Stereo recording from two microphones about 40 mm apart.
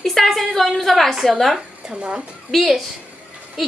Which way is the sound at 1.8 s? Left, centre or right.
Right.